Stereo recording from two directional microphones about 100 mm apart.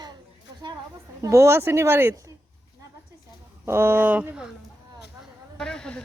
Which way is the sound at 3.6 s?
25° right (ahead or behind).